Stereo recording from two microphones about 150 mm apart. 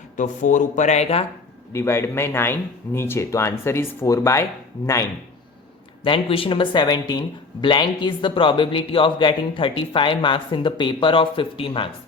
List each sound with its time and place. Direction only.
0.2 s speech: 55° left (ahead or behind)
1.7 s speech: 15° left (ahead or behind)
6.0 s speech: 40° left (ahead or behind)